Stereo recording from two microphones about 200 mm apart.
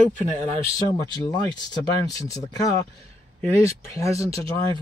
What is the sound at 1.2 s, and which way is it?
Speech, 20° left (ahead or behind).